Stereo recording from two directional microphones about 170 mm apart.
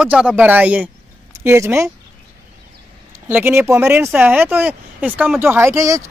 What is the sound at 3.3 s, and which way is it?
Speech, 10° right (ahead or behind).